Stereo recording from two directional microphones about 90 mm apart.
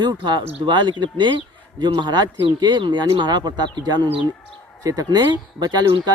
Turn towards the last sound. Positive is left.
turn(degrees=-50)  # may be behind; listen again after turning